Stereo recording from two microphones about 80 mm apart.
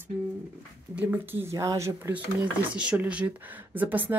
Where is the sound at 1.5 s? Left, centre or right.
Right.